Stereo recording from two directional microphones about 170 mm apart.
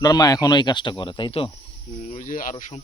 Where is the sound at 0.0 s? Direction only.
25° left (ahead or behind).